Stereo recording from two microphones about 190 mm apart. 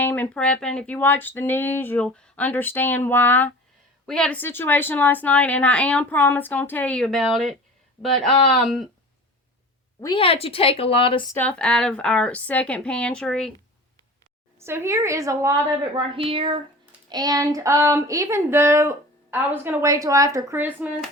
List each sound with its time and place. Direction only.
0.0 s a woman's voice: 10° left (ahead or behind)
10.0 s a woman's voice: 25° left (ahead or behind)
11.3 s a woman's voice: 10° left (ahead or behind)
14.6 s speech: 15° right (ahead or behind)
16.0 s speech: 30° right (ahead or behind); by 21.0 s 10° right (ahead or behind)